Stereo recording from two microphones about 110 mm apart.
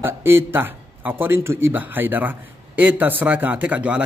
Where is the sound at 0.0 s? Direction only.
20° right (ahead or behind).